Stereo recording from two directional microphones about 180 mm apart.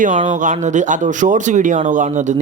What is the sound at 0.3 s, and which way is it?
Speech, 45° right (ahead or behind).